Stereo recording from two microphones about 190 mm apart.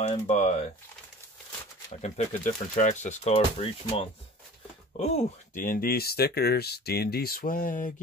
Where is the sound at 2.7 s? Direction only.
40° left (ahead or behind).